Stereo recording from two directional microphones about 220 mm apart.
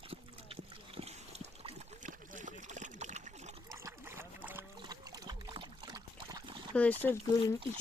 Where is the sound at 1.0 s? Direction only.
30° right (ahead or behind).